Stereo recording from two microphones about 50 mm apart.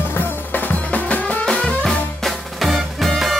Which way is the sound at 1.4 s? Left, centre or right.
Centre.